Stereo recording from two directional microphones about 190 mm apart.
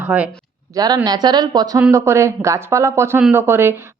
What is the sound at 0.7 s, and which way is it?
A woman's voice, 20° right (ahead or behind).